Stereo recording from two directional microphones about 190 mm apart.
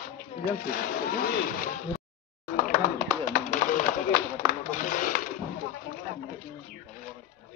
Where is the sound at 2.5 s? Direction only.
45° left (ahead or behind).